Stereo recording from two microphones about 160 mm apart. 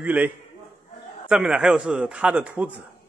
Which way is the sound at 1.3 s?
5° right (ahead or behind).